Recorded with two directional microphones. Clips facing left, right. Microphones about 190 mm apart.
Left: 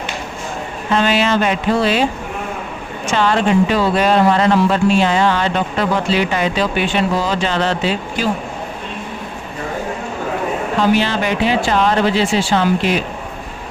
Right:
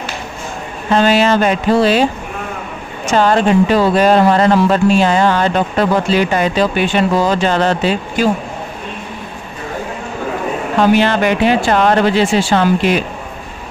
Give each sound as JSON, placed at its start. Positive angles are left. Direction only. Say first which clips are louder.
{"t": 0.9, "sound": "a sound", "louder": "right 4 dB", "side_deg": -40}
{"t": 3.1, "sound": "speech", "louder": "right 3 dB", "side_deg": -40}
{"t": 10.8, "sound": "speech", "louder": "right 5 dB", "side_deg": -55}